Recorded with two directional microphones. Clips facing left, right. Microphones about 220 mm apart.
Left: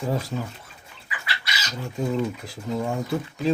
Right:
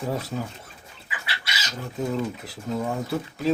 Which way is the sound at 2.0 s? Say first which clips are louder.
Left 2 dB; centre (ahead or behind).